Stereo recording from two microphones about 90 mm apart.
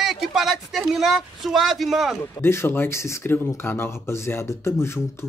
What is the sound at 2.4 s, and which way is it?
Speech, 30° left (ahead or behind).